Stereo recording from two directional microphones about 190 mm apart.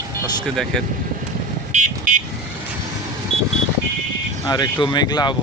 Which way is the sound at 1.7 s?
40° right (ahead or behind).